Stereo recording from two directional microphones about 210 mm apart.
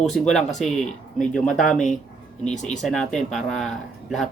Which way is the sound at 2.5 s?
35° left (ahead or behind).